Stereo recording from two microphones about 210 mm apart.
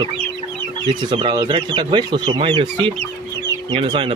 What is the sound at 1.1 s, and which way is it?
Speech, 20° right (ahead or behind).